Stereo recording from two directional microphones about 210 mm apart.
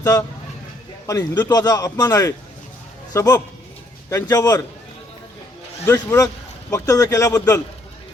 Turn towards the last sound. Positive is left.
turn(degrees=15)  # may be behind; listen again after turning